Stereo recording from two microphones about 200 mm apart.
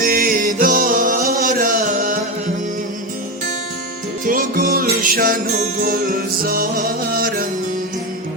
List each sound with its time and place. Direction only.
0.0 s music: 45° right (ahead or behind)
4.3 s music: 45° right (ahead or behind)